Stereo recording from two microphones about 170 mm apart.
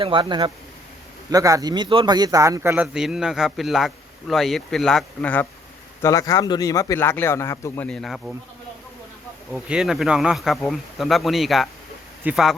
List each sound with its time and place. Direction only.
0.0 s a man's voice: 30° right (ahead or behind)
2.8 s a man's voice: 5° right (ahead or behind)
6.0 s speech: 20° left (ahead or behind)
7.9 s a man's voice: centre (ahead or behind)
9.5 s a man's voice: 5° right (ahead or behind)